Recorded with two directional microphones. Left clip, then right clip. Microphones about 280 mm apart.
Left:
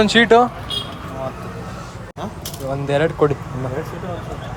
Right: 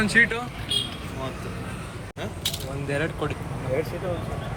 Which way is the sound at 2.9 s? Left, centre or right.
Centre.